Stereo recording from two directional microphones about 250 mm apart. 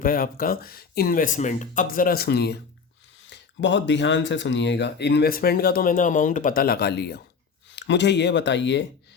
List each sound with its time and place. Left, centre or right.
0.0 s speech: left